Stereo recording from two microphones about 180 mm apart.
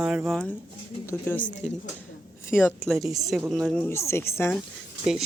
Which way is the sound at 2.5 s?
15° left (ahead or behind).